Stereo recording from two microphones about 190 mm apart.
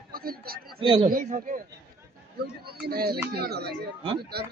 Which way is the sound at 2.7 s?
55° right (ahead or behind).